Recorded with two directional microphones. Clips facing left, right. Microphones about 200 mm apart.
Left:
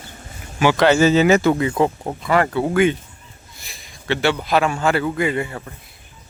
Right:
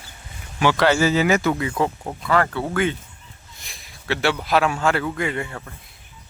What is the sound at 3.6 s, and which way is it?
A man's voice, centre (ahead or behind).